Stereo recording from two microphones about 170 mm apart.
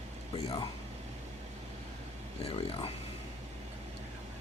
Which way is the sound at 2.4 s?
35° left (ahead or behind).